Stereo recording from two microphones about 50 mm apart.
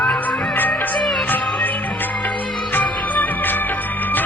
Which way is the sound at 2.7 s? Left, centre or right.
Left.